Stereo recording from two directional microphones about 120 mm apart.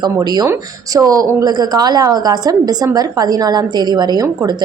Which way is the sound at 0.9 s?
30° right (ahead or behind).